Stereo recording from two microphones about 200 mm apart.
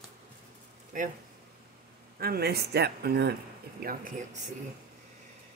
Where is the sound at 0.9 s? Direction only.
40° right (ahead or behind).